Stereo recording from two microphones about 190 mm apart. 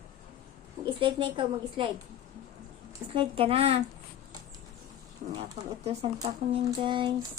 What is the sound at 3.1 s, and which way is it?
Speech, 30° right (ahead or behind).